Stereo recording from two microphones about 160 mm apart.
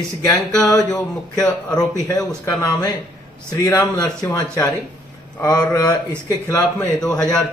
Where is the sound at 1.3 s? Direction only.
5° left (ahead or behind).